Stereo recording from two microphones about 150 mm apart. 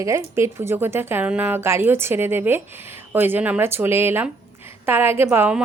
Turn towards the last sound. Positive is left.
turn(degrees=-10)  # may be behind; listen again after turning